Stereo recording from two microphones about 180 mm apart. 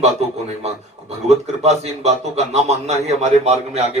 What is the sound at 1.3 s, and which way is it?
Speech, 35° right (ahead or behind).